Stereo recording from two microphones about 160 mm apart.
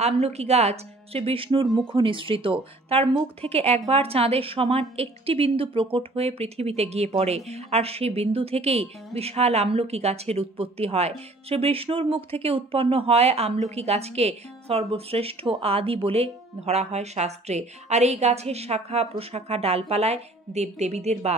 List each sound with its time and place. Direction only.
0.0 s a woman's voice: 40° right (ahead or behind)